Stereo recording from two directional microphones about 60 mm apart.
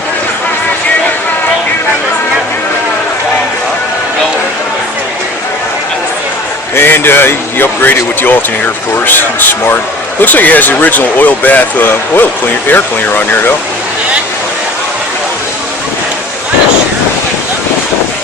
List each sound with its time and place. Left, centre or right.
6.7 s a man's voice: left